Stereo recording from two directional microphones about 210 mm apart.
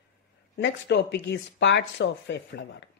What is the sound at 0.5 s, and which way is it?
Speech, 55° left (ahead or behind).